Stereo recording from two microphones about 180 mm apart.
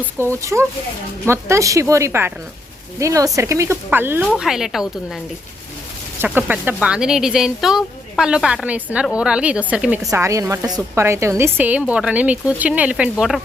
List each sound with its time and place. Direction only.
0.0 s a woman's voice: 15° right (ahead or behind)
6.2 s a woman's voice: 10° right (ahead or behind)
10.1 s a woman's voice: 15° right (ahead or behind)